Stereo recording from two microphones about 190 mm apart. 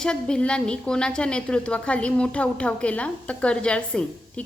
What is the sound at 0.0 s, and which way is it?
A woman's voice, 5° left (ahead or behind).